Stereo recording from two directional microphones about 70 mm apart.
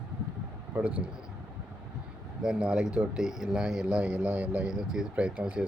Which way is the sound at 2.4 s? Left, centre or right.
Centre.